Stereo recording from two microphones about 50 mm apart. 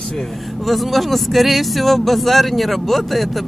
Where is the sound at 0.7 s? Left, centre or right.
Centre.